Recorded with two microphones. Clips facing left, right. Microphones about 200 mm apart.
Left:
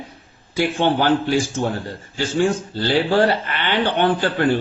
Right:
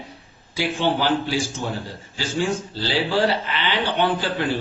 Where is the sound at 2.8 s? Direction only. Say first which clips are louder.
Left 5 dB; 55° left (ahead or behind).